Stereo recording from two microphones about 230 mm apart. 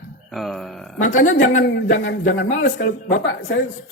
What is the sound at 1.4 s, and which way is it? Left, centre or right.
Speech, left.